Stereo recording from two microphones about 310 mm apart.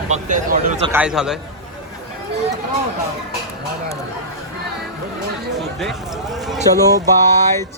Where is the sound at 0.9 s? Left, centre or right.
Centre.